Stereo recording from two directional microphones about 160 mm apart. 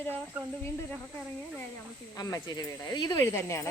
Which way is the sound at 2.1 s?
25° left (ahead or behind).